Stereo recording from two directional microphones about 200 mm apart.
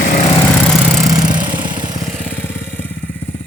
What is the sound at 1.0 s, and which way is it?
Lawn mower, 20° right (ahead or behind).